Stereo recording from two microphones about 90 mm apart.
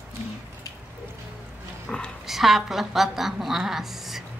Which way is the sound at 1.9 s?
5° left (ahead or behind).